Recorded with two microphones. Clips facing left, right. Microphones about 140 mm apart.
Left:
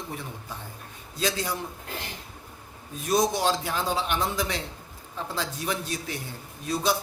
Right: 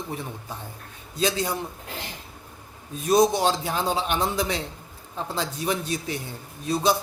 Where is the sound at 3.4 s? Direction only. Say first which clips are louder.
Right 2 dB; 25° right (ahead or behind).